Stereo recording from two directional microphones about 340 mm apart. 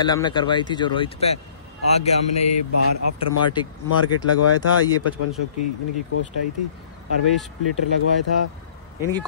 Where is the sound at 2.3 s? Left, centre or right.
Left.